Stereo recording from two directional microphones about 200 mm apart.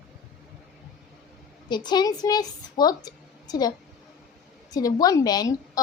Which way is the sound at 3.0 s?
20° left (ahead or behind).